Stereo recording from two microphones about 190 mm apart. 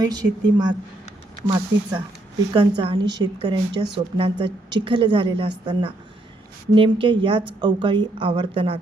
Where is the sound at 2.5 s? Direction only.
25° right (ahead or behind).